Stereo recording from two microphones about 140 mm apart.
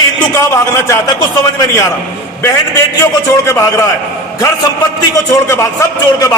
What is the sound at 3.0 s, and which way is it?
Speech, 20° left (ahead or behind).